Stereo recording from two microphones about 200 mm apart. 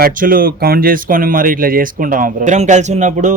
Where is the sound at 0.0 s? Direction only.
45° right (ahead or behind).